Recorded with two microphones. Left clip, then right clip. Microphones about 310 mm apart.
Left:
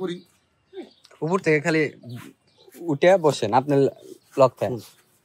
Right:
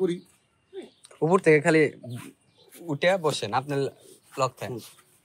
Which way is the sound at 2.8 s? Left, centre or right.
Centre.